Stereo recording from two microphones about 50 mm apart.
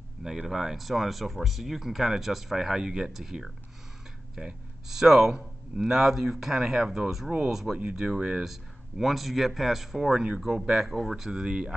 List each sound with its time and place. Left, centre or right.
0.2 s speech: centre
7.5 s speech: centre